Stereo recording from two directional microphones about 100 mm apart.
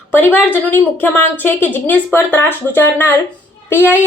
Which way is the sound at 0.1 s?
20° left (ahead or behind).